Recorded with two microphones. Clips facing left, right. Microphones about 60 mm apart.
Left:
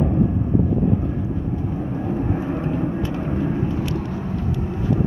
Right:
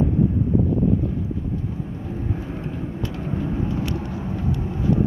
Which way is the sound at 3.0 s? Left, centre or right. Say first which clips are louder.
Left 4 dB; left.